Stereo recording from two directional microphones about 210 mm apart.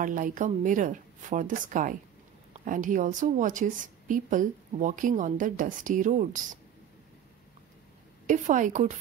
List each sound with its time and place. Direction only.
0.0 s a woman's voice: 40° right (ahead or behind)
8.3 s a woman's voice: 40° right (ahead or behind)